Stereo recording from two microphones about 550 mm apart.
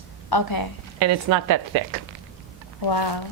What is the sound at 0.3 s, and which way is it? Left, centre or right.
Speech, left.